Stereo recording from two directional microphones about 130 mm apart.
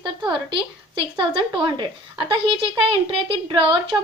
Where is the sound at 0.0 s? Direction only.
35° right (ahead or behind).